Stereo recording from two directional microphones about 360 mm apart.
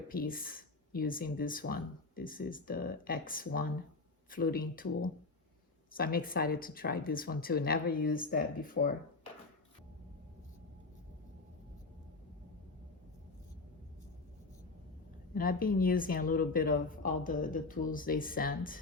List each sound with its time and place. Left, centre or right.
0.1 s speech: left
15.4 s speech: left